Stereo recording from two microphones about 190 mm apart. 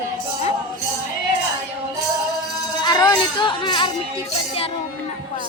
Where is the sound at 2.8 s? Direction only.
20° left (ahead or behind).